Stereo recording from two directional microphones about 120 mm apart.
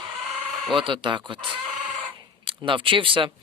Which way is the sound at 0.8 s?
45° right (ahead or behind).